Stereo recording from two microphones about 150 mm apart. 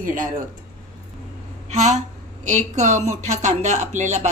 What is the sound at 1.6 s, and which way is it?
Speech, 50° right (ahead or behind).